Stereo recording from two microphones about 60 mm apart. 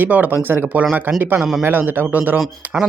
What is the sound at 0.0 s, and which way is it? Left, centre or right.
Speech, right.